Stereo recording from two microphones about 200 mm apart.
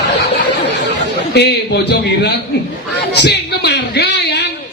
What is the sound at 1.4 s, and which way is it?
Speech, 55° left (ahead or behind).